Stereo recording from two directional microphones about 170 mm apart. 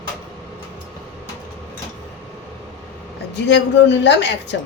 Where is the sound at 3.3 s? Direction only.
90° left.